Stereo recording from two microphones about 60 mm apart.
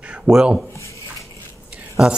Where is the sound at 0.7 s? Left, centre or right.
Left.